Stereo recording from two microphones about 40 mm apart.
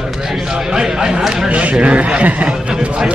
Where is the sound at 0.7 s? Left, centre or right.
Centre.